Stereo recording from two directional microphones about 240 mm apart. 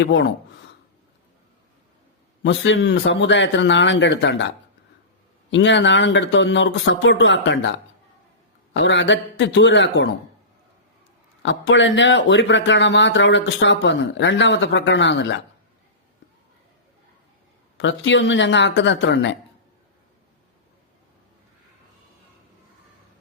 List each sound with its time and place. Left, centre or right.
0.0 s speech: left
2.4 s speech: left
5.5 s speech: left
11.4 s speech: left
17.7 s speech: left